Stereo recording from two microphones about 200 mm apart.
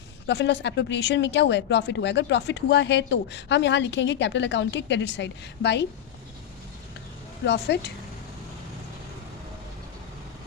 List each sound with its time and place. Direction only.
0.3 s speech: 60° left (ahead or behind)
7.4 s speech: 55° left (ahead or behind)